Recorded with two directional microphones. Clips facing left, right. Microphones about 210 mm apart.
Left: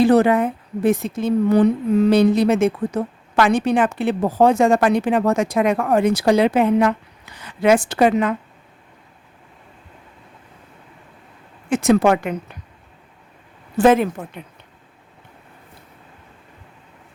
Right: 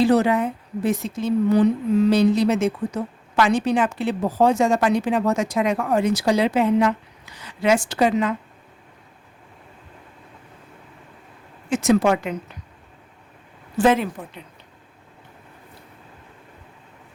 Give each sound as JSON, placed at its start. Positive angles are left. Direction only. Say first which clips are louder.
{"t": 0.0, "sound": "a woman's voice", "louder": "left 3 dB", "side_deg": 55}
{"t": 11.7, "sound": "a woman's voice", "louder": "left 3 dB", "side_deg": 55}
{"t": 13.7, "sound": "speech", "louder": "left 4 dB", "side_deg": 50}